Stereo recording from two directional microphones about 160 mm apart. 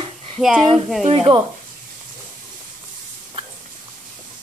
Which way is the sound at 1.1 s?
35° right (ahead or behind).